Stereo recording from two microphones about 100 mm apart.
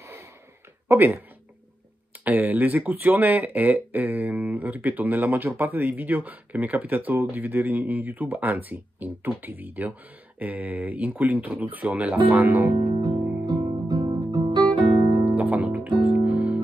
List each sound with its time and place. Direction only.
0.0 s a sound: 30° right (ahead or behind)
0.8 s speech: 20° right (ahead or behind)
2.2 s speech: 15° right (ahead or behind)
13.0 s music: 45° right (ahead or behind)
15.2 s music: 15° right (ahead or behind)